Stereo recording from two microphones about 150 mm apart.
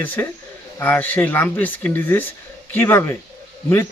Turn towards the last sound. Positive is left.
turn(degrees=15)  # may be behind; listen again after turning